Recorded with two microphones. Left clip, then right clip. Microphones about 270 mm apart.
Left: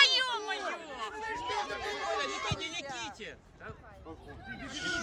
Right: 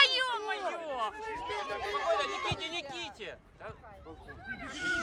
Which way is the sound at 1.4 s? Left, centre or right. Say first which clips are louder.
Even; right.